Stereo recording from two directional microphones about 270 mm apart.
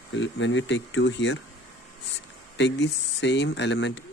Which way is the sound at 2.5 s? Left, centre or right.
Left.